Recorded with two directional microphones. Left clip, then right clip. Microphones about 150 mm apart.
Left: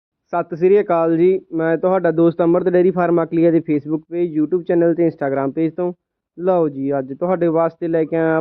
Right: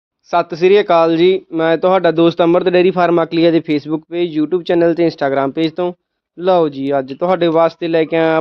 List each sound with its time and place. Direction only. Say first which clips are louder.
0.3 s a man's voice: right 4 dB; 15° right (ahead or behind)